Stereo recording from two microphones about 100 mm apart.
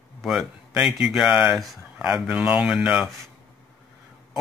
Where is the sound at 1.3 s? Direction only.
15° right (ahead or behind).